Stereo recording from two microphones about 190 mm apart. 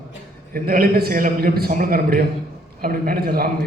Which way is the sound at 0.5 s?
50° right (ahead or behind).